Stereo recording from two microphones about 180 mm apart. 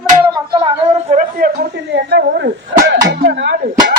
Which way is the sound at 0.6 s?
30° right (ahead or behind).